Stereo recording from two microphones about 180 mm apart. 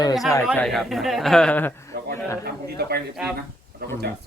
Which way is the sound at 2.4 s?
60° right (ahead or behind).